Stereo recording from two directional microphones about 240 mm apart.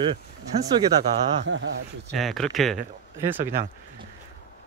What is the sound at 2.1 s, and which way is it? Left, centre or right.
Speech, centre.